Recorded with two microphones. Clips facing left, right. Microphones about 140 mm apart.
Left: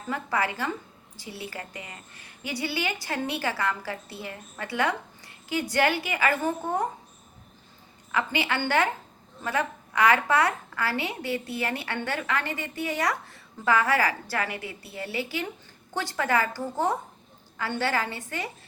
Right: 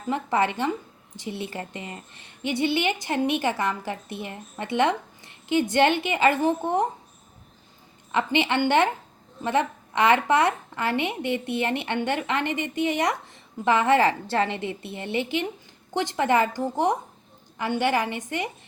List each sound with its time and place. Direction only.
0.1 s a woman's voice: 25° right (ahead or behind)
8.1 s a woman's voice: 25° right (ahead or behind)